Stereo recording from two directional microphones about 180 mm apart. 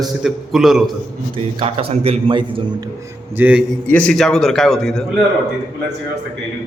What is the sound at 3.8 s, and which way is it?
A man's voice, 5° left (ahead or behind).